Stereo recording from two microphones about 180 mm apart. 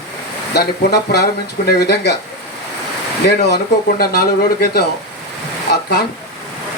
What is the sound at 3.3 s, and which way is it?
Speech, 65° left (ahead or behind).